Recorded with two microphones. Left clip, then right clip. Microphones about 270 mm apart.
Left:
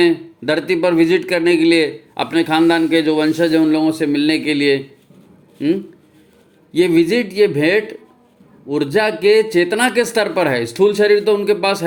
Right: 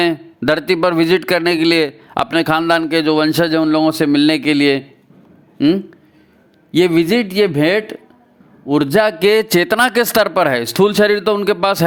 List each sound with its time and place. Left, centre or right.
0.0 s speech: right